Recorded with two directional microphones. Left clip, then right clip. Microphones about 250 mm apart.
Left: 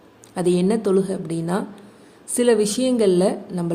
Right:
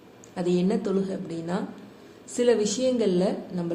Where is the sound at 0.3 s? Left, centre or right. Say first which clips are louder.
Left 6 dB; left.